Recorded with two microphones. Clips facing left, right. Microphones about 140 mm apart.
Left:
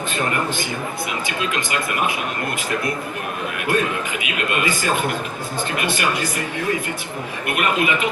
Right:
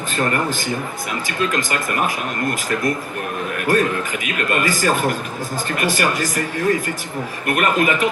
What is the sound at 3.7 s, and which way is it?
A man's voice, 40° right (ahead or behind).